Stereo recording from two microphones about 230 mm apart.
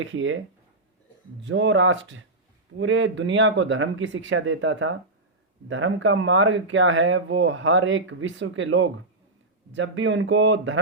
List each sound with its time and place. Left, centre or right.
0.0 s speech: right
1.5 s speech: right